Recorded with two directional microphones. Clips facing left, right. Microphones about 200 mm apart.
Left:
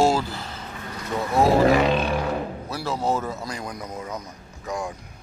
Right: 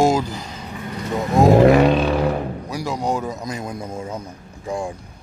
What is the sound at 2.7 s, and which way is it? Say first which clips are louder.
A man's voice: right 1 dB; 15° right (ahead or behind).